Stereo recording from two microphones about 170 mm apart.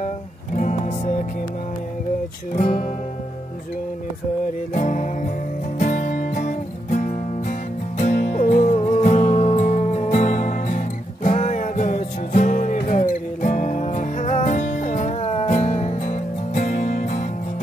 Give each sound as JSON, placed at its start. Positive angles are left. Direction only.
{"t": 0.6, "sound": "music", "side_deg": 40}
{"t": 2.5, "sound": "music", "side_deg": 45}
{"t": 4.7, "sound": "music", "side_deg": 45}